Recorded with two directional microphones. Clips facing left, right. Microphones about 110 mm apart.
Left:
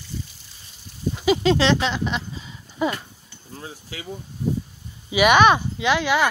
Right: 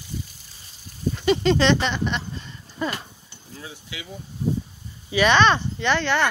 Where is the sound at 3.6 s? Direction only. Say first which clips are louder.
Left 2 dB; 40° left (ahead or behind).